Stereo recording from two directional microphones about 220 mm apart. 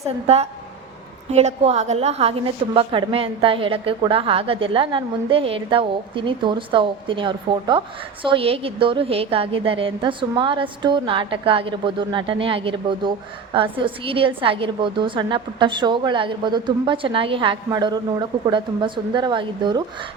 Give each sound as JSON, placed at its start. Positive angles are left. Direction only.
{"t": 0.0, "sound": "a woman's voice", "side_deg": -30}